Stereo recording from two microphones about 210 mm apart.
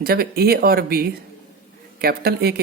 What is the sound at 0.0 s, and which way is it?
Speech, 45° right (ahead or behind).